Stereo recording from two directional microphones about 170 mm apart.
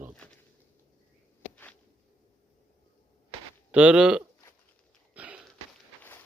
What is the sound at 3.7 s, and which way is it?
Speech, 10° right (ahead or behind).